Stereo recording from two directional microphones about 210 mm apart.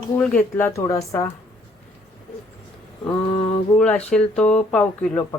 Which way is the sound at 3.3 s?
30° left (ahead or behind).